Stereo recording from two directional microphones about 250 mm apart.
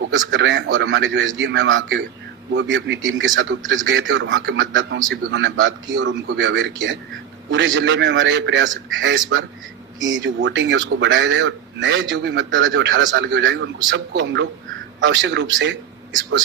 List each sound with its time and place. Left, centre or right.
0.1 s speech: right